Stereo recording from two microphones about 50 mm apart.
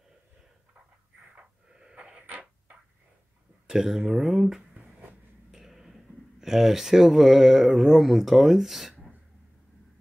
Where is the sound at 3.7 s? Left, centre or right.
Centre.